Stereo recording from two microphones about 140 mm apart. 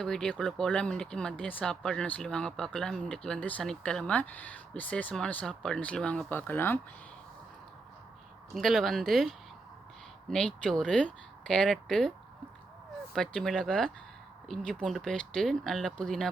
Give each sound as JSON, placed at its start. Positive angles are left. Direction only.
{"t": 0.0, "sound": "speech", "side_deg": 5}
{"t": 8.5, "sound": "speech", "side_deg": 0}
{"t": 13.1, "sound": "speech", "side_deg": 5}